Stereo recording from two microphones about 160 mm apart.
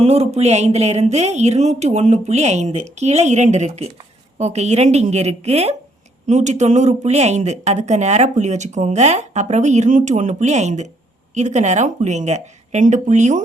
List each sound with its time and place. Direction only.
0.0 s speech: 40° right (ahead or behind)